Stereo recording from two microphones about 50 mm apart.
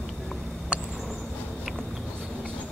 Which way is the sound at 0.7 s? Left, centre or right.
Right.